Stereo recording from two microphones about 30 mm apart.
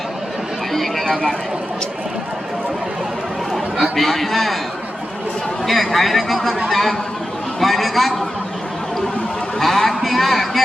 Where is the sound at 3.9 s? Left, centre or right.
Centre.